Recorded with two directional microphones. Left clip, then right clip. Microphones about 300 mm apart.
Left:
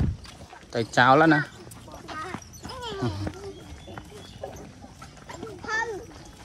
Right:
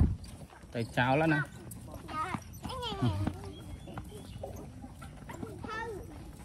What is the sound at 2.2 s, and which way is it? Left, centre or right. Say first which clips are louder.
Horse: left 2 dB; centre.